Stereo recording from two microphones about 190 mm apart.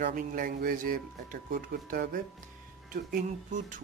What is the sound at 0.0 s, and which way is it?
Speech, 45° right (ahead or behind).